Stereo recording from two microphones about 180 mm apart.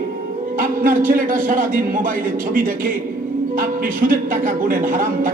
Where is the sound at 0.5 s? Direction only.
50° right (ahead or behind).